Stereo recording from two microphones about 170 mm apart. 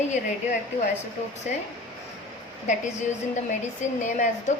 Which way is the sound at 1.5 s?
45° left (ahead or behind).